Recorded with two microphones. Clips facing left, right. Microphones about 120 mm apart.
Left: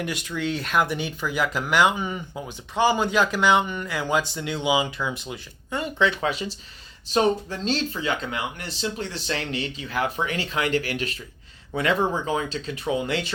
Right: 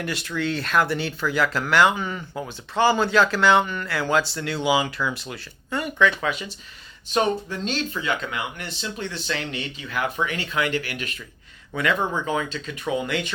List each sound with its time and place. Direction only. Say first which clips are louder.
0.0 s speech: right 1 dB; 15° left (ahead or behind); by 13.3 s 30° left (ahead or behind)